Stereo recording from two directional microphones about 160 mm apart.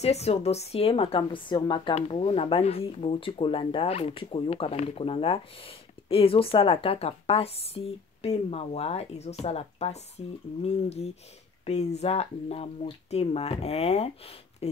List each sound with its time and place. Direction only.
0.0 s speech: 40° left (ahead or behind)